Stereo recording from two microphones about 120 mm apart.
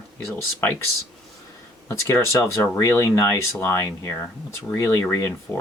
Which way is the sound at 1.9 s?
20° left (ahead or behind).